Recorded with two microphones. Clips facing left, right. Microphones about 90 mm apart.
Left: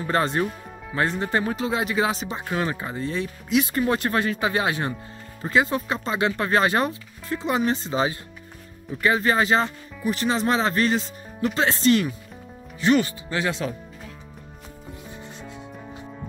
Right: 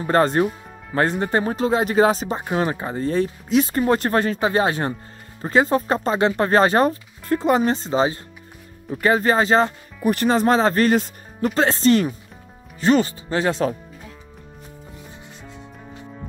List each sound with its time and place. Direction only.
0.1 s speech: 40° right (ahead or behind)
10.0 s speech: 50° right (ahead or behind)